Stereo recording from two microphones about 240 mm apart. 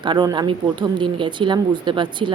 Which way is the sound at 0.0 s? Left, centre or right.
Centre.